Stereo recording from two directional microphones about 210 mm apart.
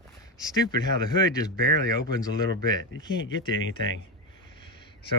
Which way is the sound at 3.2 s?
65° left (ahead or behind).